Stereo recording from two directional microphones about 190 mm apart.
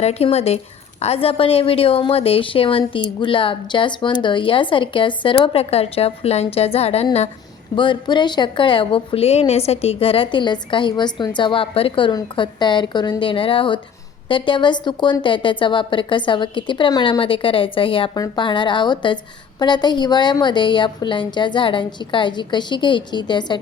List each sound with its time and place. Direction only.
0.0 s a woman's voice: 35° left (ahead or behind)